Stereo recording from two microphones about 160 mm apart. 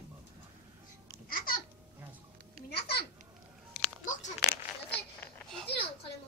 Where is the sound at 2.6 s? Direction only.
80° left.